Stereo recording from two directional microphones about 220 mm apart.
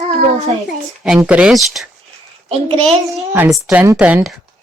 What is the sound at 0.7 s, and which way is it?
Speech, centre (ahead or behind).